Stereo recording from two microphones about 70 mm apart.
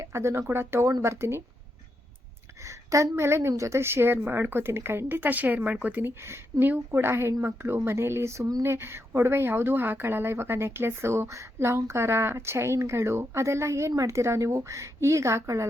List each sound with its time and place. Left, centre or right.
0.0 s a woman's voice: right
2.6 s a woman's voice: right